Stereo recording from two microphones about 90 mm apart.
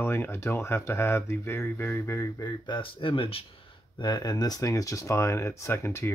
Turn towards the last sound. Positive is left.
turn(degrees=30)  # may be behind; listen again after turning